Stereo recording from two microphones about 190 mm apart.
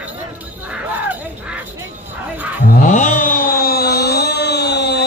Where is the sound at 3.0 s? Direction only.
45° left (ahead or behind).